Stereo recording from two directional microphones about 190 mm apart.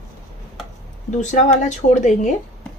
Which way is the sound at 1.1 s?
40° left (ahead or behind).